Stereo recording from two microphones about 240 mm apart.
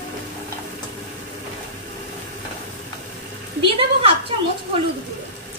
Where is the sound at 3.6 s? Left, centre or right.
Right.